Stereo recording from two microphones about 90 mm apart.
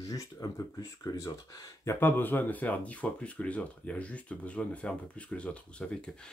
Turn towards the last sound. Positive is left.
turn(degrees=10)  # may be behind; listen again after turning